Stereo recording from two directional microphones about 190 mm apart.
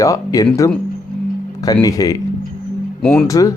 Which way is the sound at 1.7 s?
20° left (ahead or behind).